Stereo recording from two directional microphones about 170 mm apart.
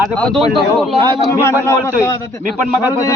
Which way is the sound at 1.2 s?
15° left (ahead or behind).